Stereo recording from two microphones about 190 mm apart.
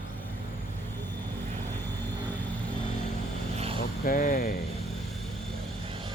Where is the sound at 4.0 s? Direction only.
50° left (ahead or behind).